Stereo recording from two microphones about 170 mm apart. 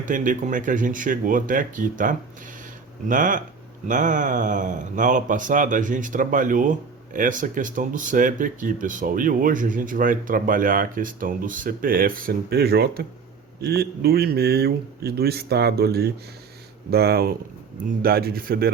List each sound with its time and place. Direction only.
0.0 s speech: 50° right (ahead or behind)